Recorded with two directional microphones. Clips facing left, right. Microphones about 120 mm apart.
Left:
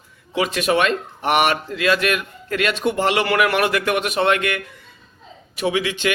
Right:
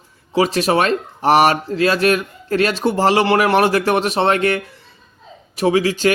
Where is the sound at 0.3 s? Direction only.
35° right (ahead or behind).